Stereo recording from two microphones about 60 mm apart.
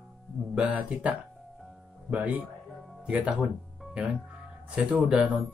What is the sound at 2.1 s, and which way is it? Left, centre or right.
Speech, right.